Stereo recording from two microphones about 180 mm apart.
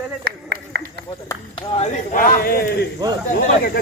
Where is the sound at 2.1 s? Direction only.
50° left (ahead or behind).